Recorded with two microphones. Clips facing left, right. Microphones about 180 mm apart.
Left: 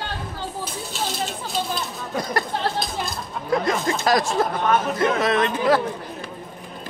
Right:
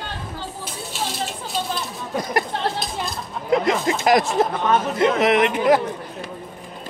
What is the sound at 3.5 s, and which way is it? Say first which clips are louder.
Speech: right 3 dB; 20° right (ahead or behind).